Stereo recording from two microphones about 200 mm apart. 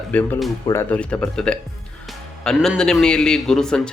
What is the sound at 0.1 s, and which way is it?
A man's voice, 5° left (ahead or behind).